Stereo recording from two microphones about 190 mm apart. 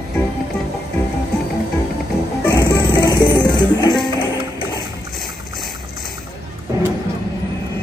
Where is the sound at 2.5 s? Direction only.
20° left (ahead or behind).